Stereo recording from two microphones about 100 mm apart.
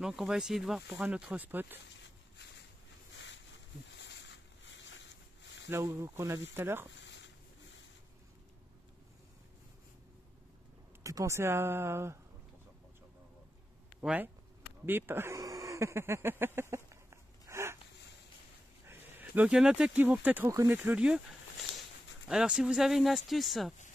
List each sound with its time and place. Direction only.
0.0 s speech: 5° right (ahead or behind)
5.7 s speech: 25° right (ahead or behind)
11.1 s speech: 30° right (ahead or behind)
14.0 s speech: 15° right (ahead or behind)
16.7 s a sound: 30° right (ahead or behind)
18.9 s a sound: 20° right (ahead or behind)
19.5 s speech: 10° right (ahead or behind)
22.3 s speech: 5° right (ahead or behind)